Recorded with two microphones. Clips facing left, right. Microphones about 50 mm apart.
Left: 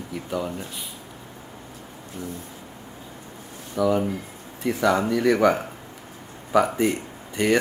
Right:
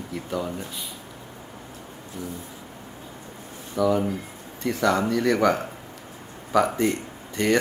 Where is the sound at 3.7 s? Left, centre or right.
Centre.